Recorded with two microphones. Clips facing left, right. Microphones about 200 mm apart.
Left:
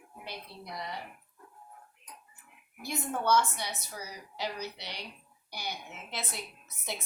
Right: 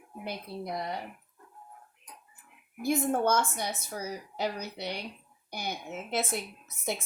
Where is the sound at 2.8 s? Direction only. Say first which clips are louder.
Right 6 dB; 50° right (ahead or behind).